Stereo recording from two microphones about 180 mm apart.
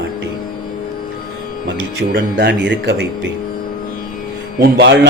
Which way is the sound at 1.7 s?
70° right (ahead or behind).